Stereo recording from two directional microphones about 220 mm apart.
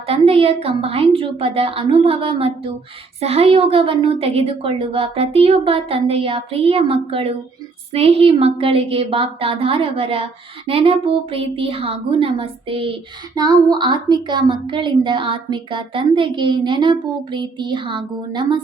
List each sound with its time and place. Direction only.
0.1 s a woman's voice: 25° right (ahead or behind)